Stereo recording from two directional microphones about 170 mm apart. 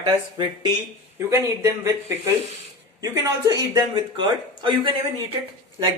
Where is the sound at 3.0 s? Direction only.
20° right (ahead or behind).